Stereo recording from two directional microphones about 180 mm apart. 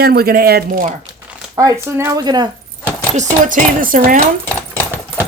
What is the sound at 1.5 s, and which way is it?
Speech, 15° right (ahead or behind).